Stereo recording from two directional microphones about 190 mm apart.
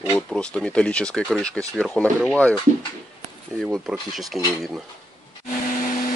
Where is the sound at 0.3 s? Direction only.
5° left (ahead or behind).